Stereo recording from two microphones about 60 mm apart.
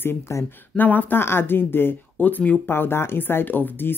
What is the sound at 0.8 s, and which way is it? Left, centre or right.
Speech, left.